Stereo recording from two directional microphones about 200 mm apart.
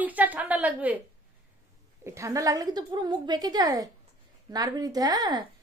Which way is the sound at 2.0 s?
15° right (ahead or behind).